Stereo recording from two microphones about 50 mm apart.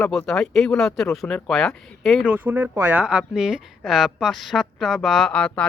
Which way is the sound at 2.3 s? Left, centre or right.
Right.